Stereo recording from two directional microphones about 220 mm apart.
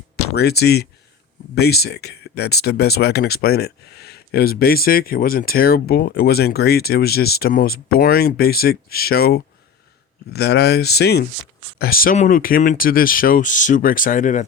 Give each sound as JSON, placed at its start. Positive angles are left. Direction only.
{"t": 0.3, "sound": "speech", "side_deg": 45}